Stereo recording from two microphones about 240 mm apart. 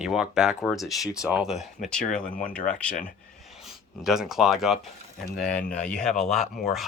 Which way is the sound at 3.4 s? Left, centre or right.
Centre.